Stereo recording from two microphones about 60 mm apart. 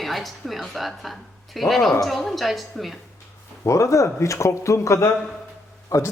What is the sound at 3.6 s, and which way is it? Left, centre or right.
Speech, left.